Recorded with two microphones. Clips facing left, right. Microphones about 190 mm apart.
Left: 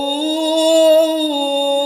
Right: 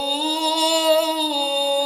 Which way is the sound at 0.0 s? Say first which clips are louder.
Left 7 dB; 45° left (ahead or behind).